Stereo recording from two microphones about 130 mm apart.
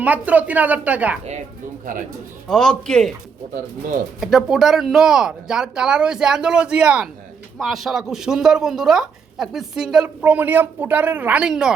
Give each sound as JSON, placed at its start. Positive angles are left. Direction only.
{"t": 0.0, "sound": "speech", "side_deg": -10}
{"t": 1.2, "sound": "speech", "side_deg": -60}
{"t": 2.5, "sound": "speech", "side_deg": 5}
{"t": 4.2, "sound": "speech", "side_deg": -5}